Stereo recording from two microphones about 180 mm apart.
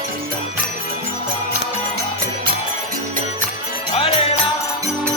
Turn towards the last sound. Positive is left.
turn(degrees=30)  # may be behind; listen again after turning